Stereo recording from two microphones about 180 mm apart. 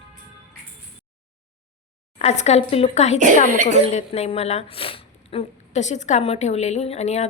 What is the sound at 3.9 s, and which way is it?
A woman's voice, 35° left (ahead or behind).